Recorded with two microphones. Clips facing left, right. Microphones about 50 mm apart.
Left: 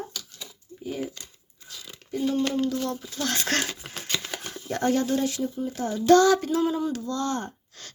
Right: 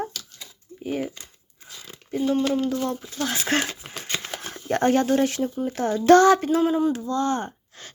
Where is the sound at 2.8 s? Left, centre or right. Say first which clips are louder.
Right 2 dB; centre.